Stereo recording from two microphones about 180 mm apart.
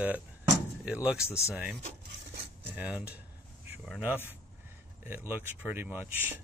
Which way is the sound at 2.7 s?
10° right (ahead or behind).